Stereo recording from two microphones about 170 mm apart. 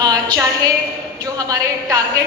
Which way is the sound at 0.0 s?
25° right (ahead or behind).